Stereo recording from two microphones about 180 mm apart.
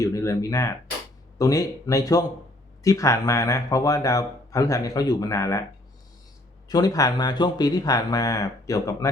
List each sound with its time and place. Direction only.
0.0 s speech: 15° left (ahead or behind)
6.7 s speech: 20° left (ahead or behind)